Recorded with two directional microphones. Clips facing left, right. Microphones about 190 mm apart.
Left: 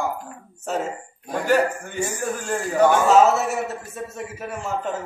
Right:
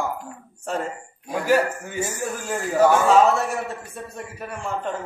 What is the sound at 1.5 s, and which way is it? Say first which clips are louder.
A man's voice: even; 5° right (ahead or behind).